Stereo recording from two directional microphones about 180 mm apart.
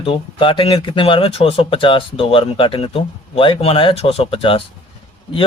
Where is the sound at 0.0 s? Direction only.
30° left (ahead or behind).